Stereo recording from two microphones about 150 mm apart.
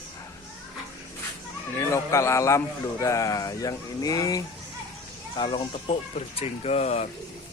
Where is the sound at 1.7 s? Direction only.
20° left (ahead or behind).